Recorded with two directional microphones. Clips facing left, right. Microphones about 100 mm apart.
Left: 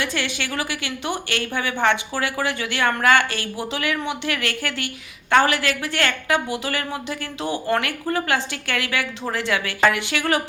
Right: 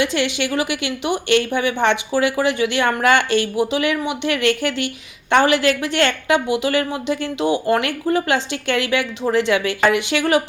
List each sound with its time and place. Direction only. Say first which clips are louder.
0.0 s speech: right 6 dB; 20° right (ahead or behind)